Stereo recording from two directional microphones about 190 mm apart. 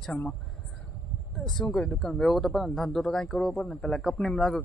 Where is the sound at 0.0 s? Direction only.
5° left (ahead or behind).